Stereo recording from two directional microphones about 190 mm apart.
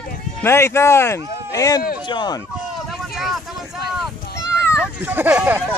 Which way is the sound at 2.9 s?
Centre (ahead or behind).